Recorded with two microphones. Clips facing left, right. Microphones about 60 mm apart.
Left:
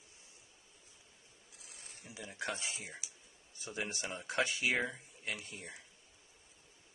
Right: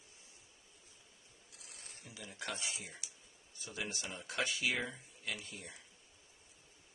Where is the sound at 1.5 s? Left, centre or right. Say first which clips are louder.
Even; centre.